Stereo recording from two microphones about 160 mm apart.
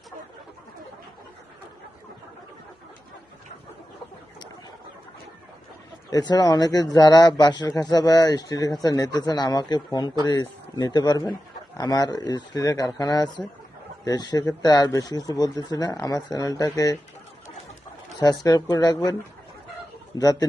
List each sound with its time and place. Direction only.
6.1 s a man's voice: 25° left (ahead or behind)
18.2 s a man's voice: 25° left (ahead or behind)
20.1 s a man's voice: 25° left (ahead or behind)